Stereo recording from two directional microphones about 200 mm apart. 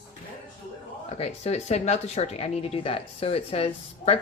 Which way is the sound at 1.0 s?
30° left (ahead or behind).